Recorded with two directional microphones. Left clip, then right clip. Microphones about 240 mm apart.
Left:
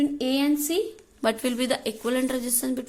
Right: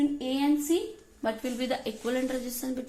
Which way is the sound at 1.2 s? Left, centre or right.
Left.